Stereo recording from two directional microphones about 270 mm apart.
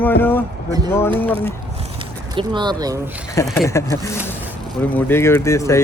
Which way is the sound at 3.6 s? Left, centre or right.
Centre.